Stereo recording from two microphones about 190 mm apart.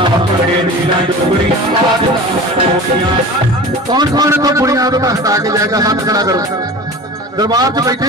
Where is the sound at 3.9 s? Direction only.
20° right (ahead or behind).